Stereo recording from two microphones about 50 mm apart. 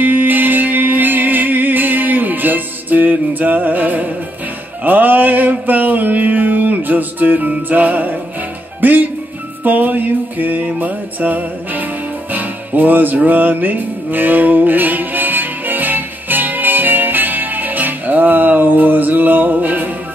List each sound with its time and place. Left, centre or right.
0.0 s music: right
4.8 s mantra: right
8.8 s music: right